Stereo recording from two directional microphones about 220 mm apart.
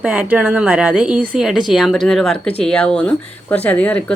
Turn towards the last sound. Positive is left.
turn(degrees=5)  # may be behind; listen again after turning